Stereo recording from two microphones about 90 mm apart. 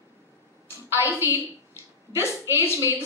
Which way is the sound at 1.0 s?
30° right (ahead or behind).